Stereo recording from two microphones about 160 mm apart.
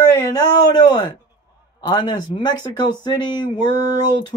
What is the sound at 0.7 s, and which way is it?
Speech, 25° left (ahead or behind).